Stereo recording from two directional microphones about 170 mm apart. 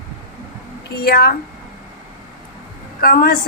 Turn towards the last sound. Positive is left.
turn(degrees=60)  # may be behind; listen again after turning